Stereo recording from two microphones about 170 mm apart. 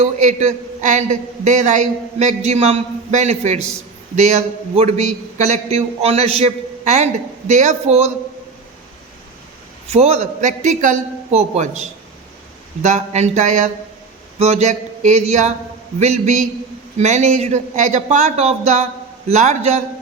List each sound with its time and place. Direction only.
0.0 s a man's voice: 45° right (ahead or behind)
9.8 s a man's voice: 40° right (ahead or behind)